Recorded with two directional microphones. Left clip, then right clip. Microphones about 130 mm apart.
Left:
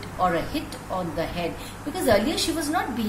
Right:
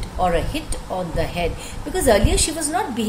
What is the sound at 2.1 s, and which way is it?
Speech, 90° right.